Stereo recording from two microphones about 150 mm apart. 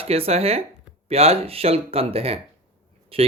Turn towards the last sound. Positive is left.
turn(degrees=-40)  # may be behind; listen again after turning